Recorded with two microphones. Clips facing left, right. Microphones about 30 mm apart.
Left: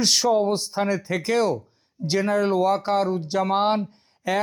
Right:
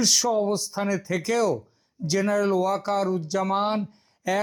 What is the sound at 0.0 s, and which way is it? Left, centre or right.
Speech, left.